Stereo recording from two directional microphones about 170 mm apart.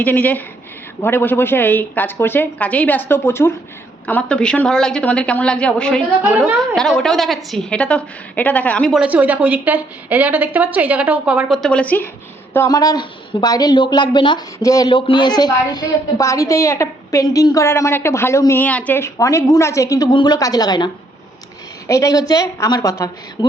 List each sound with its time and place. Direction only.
0.0 s a woman's voice: 10° left (ahead or behind)
9.0 s a woman's voice: 10° right (ahead or behind); by 12.0 s 10° left (ahead or behind)
12.5 s a woman's voice: 20° left (ahead or behind)